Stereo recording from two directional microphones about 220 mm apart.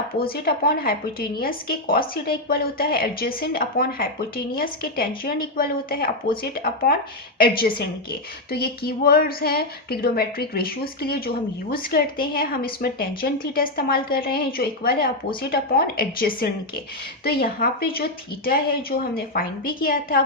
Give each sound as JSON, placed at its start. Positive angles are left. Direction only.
{"t": 0.2, "sound": "speech", "side_deg": 45}